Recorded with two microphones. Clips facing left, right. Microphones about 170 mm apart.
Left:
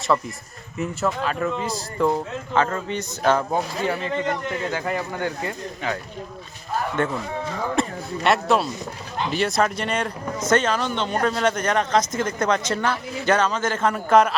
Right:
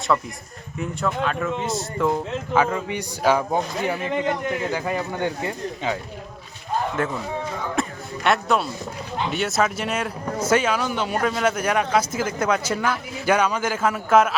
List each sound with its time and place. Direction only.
0.1 s speech: 10° left (ahead or behind); by 6.0 s 20° right (ahead or behind)
6.9 s a man's voice: 5° right (ahead or behind)